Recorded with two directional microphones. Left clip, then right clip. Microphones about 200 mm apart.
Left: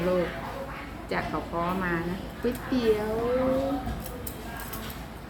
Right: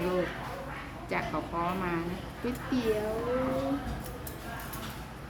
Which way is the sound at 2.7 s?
10° right (ahead or behind).